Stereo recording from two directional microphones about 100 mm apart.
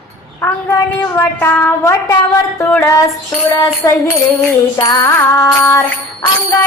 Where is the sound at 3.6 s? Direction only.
30° left (ahead or behind).